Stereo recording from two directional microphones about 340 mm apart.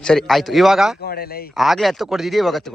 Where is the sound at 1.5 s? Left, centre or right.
Centre.